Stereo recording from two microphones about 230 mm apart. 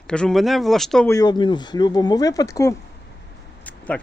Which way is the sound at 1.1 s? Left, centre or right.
Centre.